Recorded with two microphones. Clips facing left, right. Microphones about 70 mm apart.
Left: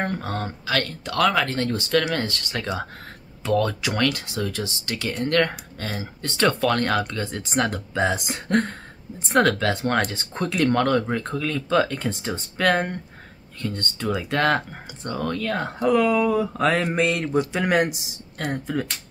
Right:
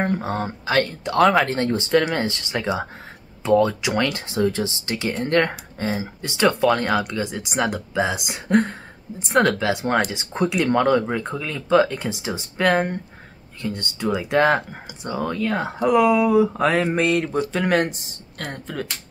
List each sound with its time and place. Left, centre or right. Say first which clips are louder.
0.0 s speech: right 4 dB; centre